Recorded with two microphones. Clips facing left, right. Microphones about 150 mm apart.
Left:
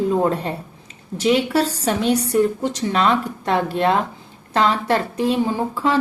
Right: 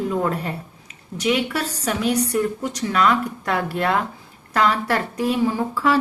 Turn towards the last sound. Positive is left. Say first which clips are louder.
# even
turn(degrees=25)  # may be behind; listen again after turning